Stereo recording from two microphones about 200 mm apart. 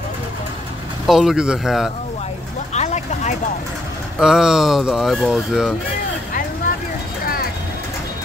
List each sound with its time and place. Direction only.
1.0 s speech: centre (ahead or behind)
2.7 s vehicle: 35° left (ahead or behind)
4.2 s speech: 5° right (ahead or behind)